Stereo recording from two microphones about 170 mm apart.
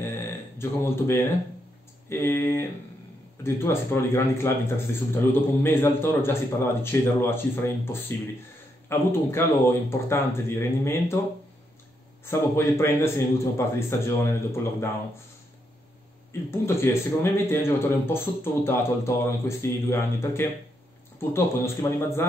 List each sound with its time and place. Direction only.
0.0 s a sound: 15° left (ahead or behind)
2.0 s speech: 15° left (ahead or behind)
12.3 s speech: 15° left (ahead or behind)
16.3 s speech: 15° left (ahead or behind)